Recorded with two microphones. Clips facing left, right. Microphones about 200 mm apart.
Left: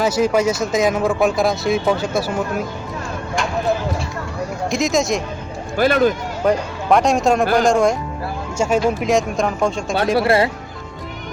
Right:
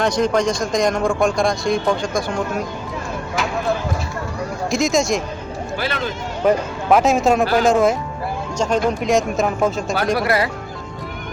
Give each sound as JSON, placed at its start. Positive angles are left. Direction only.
{"t": 0.0, "sound": "speech", "side_deg": 5}
{"t": 4.7, "sound": "speech", "side_deg": 0}
{"t": 5.7, "sound": "speech", "side_deg": 45}
{"t": 6.4, "sound": "speech", "side_deg": -5}
{"t": 8.5, "sound": "speech", "side_deg": 10}
{"t": 10.2, "sound": "speech", "side_deg": 25}